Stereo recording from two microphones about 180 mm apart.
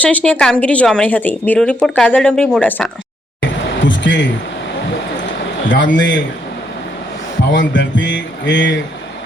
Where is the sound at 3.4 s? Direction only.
90° left.